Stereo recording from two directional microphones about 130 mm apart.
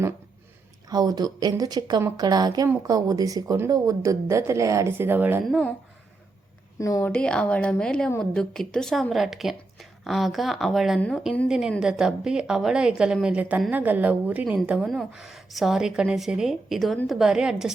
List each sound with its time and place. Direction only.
0.9 s a woman's voice: 30° right (ahead or behind)
5.5 s a woman's voice: 5° left (ahead or behind)
6.7 s a woman's voice: 25° left (ahead or behind)
7.0 s a woman's voice: 10° left (ahead or behind)